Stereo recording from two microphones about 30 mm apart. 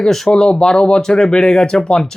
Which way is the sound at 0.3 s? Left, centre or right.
Left.